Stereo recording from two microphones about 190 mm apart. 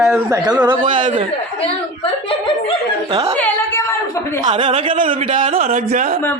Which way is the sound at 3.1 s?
30° right (ahead or behind).